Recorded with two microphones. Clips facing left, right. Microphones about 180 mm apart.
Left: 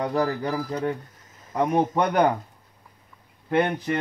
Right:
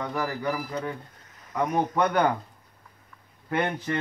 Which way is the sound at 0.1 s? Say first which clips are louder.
Left 4 dB; 30° left (ahead or behind).